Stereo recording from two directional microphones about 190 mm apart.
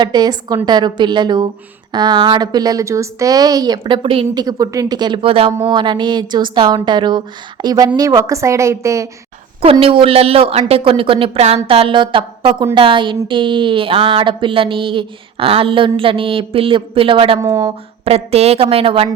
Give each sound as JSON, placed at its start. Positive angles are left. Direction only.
{"t": 0.0, "sound": "a woman's voice", "side_deg": -20}
{"t": 9.7, "sound": "a woman's voice", "side_deg": -30}
{"t": 17.4, "sound": "a woman's voice", "side_deg": -15}
{"t": 18.0, "sound": "a woman's voice", "side_deg": -30}